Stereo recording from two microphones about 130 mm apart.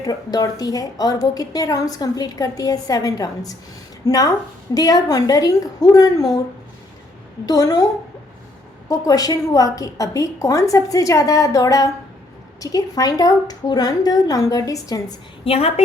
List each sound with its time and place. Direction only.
0.0 s a woman's voice: 30° left (ahead or behind)
7.4 s a woman's voice: 30° left (ahead or behind)
8.9 s a woman's voice: 30° left (ahead or behind)
15.4 s a woman's voice: 50° left (ahead or behind)